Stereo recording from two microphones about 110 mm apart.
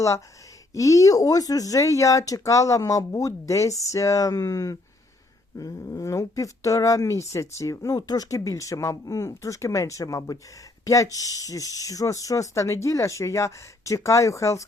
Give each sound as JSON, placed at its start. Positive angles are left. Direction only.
{"t": 0.7, "sound": "speech", "side_deg": 30}